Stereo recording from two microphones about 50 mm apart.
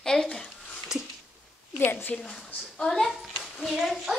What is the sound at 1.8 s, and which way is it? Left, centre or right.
Speech, left.